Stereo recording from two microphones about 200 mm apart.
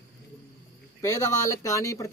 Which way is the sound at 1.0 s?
15° left (ahead or behind).